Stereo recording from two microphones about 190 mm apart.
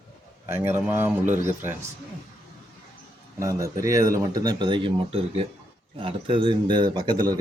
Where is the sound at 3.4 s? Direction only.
15° right (ahead or behind).